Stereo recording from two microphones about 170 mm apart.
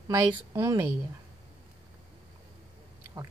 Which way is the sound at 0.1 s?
20° right (ahead or behind).